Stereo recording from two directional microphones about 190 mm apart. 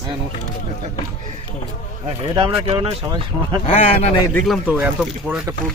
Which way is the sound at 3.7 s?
35° left (ahead or behind).